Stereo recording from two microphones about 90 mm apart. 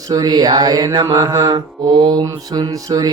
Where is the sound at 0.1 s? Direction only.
50° right (ahead or behind).